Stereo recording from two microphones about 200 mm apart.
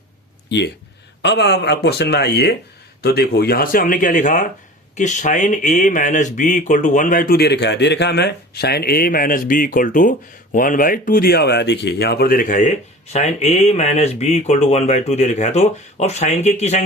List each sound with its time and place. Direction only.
1.2 s speech: 55° left (ahead or behind); by 16.8 s 35° left (ahead or behind)